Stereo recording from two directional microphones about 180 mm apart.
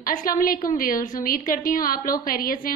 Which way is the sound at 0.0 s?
50° left (ahead or behind).